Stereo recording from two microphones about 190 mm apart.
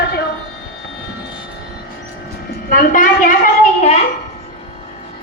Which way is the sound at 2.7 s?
45° left (ahead or behind).